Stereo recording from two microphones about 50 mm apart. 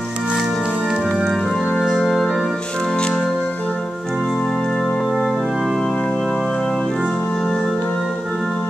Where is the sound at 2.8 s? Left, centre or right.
Centre.